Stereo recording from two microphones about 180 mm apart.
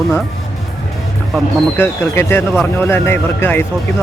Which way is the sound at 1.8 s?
10° left (ahead or behind).